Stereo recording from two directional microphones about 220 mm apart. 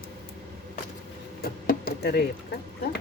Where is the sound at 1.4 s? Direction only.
45° left (ahead or behind).